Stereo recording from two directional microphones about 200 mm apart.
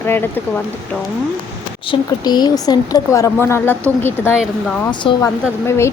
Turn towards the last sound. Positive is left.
turn(degrees=15)  # may be behind; listen again after turning